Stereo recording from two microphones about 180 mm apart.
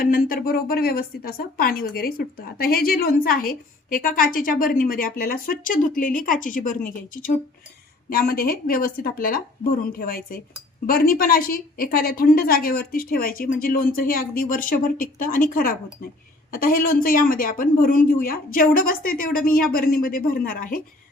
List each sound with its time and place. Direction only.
0.0 s speech: 55° left (ahead or behind)